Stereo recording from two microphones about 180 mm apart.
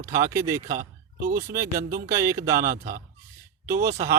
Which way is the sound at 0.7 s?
50° right (ahead or behind).